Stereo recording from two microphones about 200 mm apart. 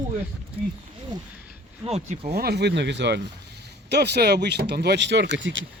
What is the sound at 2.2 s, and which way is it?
Speech, 50° right (ahead or behind).